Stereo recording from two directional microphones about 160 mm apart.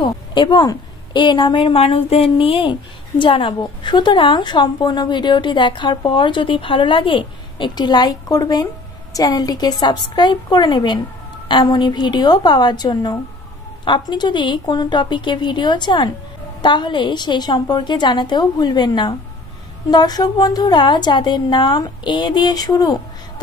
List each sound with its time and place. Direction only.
0.0 s a woman's voice: 30° left (ahead or behind)